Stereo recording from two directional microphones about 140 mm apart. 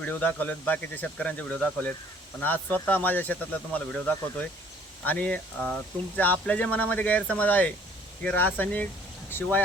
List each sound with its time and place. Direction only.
0.0 s speech: 10° left (ahead or behind)
5.0 s speech: 10° left (ahead or behind)